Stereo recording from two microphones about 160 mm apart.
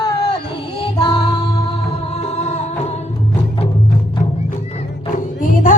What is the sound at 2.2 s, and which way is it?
Music, 45° left (ahead or behind).